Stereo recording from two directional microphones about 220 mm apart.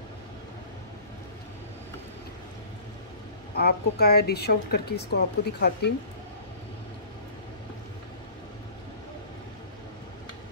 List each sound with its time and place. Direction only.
3.5 s speech: 45° left (ahead or behind)